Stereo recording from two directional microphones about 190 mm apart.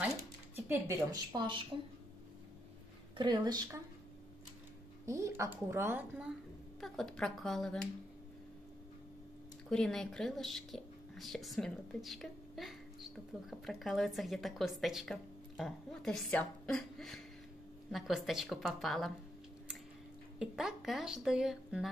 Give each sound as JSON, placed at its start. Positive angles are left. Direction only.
{"t": 0.0, "sound": "a sound", "side_deg": -15}
{"t": 3.2, "sound": "speech", "side_deg": -25}
{"t": 5.0, "sound": "a woman's voice", "side_deg": -15}
{"t": 9.7, "sound": "speech", "side_deg": 0}
{"t": 20.3, "sound": "speech", "side_deg": -5}